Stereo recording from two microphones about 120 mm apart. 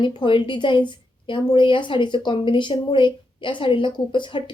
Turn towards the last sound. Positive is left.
turn(degrees=40)  # may be behind; listen again after turning